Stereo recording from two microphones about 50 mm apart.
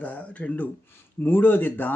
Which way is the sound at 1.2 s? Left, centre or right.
Left.